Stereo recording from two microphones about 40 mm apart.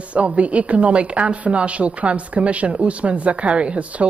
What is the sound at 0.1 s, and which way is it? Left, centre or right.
Speech, right.